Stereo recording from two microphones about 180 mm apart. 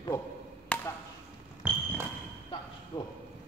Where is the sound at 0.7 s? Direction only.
10° left (ahead or behind).